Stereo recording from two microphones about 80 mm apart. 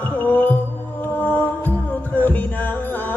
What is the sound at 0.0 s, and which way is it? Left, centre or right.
Music, left.